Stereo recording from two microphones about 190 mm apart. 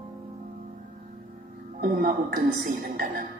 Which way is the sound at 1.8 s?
45° right (ahead or behind).